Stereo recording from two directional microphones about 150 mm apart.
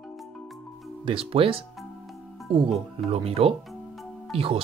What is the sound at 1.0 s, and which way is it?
Speech, 40° right (ahead or behind).